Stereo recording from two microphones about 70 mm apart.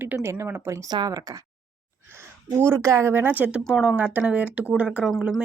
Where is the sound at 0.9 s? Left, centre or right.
Right.